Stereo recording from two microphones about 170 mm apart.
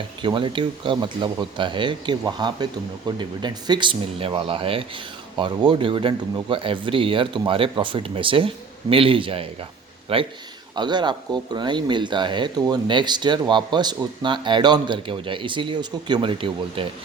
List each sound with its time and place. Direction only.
0.2 s speech: 30° right (ahead or behind)